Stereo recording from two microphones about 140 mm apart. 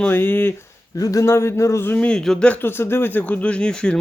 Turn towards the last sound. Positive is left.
turn(degrees=5)  # may be behind; listen again after turning